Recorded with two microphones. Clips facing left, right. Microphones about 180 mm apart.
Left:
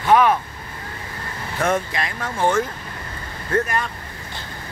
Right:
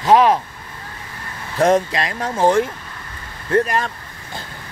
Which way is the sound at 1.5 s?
35° right (ahead or behind).